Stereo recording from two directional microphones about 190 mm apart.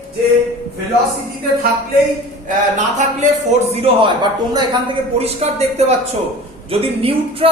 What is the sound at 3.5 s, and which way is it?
Speech, 35° right (ahead or behind).